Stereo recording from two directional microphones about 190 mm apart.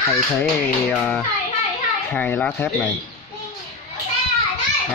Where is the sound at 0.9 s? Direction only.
10° left (ahead or behind).